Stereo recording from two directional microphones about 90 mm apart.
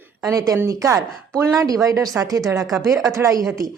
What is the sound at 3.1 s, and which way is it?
Speech, 35° right (ahead or behind).